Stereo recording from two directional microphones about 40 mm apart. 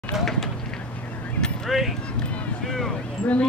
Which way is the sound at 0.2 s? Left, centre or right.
Centre.